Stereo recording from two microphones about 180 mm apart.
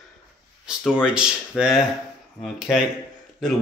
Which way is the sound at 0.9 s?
5° right (ahead or behind).